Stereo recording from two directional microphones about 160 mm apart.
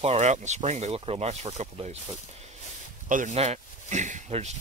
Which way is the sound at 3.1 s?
50° right (ahead or behind).